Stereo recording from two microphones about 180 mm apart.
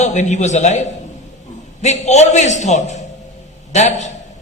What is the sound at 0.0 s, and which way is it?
A man's voice, 40° left (ahead or behind).